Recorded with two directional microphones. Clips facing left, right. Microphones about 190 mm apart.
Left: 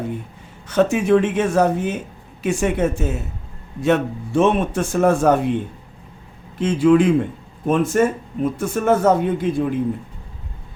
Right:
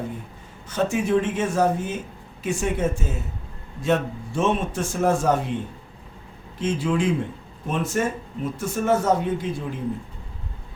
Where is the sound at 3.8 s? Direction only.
65° left (ahead or behind).